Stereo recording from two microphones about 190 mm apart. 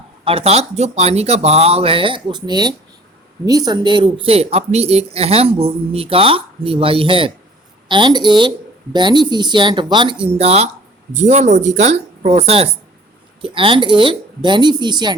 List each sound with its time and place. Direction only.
0.3 s speech: 30° right (ahead or behind)